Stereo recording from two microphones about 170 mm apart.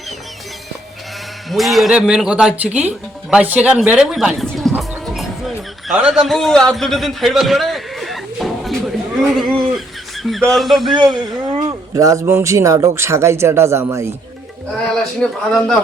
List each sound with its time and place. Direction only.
1.5 s speech: centre (ahead or behind)
4.8 s music: centre (ahead or behind)
9.3 s speech: centre (ahead or behind)
10.9 s speech: 25° right (ahead or behind)
15.2 s speech: 5° left (ahead or behind)